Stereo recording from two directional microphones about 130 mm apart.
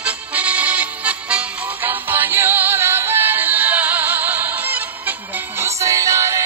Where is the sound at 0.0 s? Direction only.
10° right (ahead or behind).